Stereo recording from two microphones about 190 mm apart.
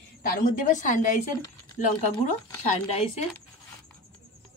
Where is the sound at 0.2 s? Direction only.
50° left (ahead or behind).